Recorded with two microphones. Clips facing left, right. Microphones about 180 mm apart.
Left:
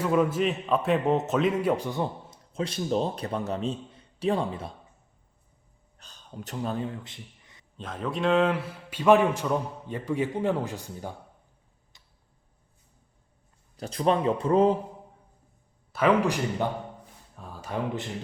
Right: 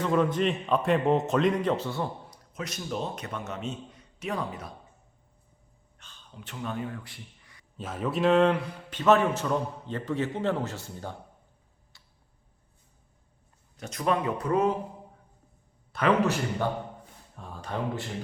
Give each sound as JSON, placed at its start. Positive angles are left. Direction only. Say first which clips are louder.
{"t": 0.0, "sound": "a man's voice", "louder": "left 1 dB", "side_deg": 10}
{"t": 2.5, "sound": "a man's voice", "louder": "left 7 dB", "side_deg": 30}
{"t": 6.0, "sound": "speech", "louder": "left 7 dB", "side_deg": 40}
{"t": 7.8, "sound": "a man's voice", "louder": "right 2 dB", "side_deg": -5}
{"t": 11.9, "sound": "tick-tock", "louder": "even", "side_deg": 20}
{"t": 13.7, "sound": "speech", "louder": "left 3 dB", "side_deg": 30}
{"t": 15.9, "sound": "a man's voice", "louder": "left 1 dB", "side_deg": 5}
{"t": 17.3, "sound": "a sound", "louder": "even", "side_deg": 5}